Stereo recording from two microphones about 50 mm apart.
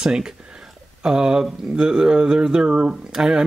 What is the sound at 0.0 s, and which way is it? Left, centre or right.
Speech, centre.